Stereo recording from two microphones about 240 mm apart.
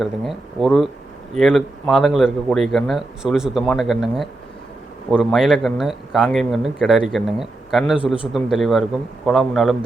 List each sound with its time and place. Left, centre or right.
0.0 s speech: centre